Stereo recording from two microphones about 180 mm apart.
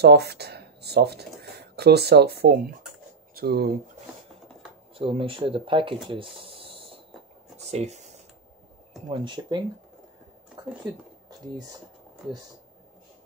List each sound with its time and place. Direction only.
0.0 s speech: 65° right (ahead or behind)
4.9 s speech: 30° right (ahead or behind)
6.0 s hiss: 30° right (ahead or behind)
7.5 s a sound: 35° right (ahead or behind)
9.1 s speech: 25° right (ahead or behind)
10.6 s a sound: 25° right (ahead or behind)